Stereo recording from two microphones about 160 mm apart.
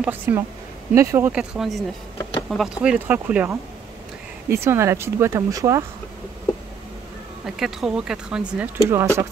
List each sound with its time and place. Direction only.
0.0 s speech: 10° right (ahead or behind)
7.4 s speech: 5° right (ahead or behind)
8.8 s speech: 15° right (ahead or behind)